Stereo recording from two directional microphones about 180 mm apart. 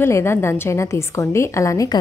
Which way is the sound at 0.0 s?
15° left (ahead or behind).